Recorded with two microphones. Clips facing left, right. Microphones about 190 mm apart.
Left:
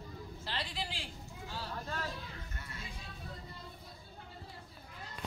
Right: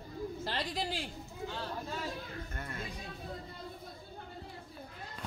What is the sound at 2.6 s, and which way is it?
Speech, 50° right (ahead or behind).